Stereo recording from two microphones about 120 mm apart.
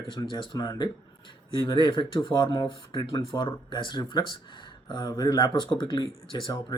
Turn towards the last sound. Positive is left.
turn(degrees=40)  # may be behind; listen again after turning